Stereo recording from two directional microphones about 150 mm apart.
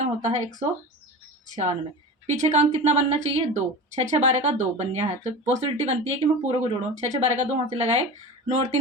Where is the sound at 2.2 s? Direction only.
50° right (ahead or behind).